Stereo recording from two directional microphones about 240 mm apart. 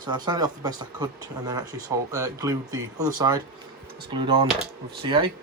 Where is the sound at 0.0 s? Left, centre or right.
Centre.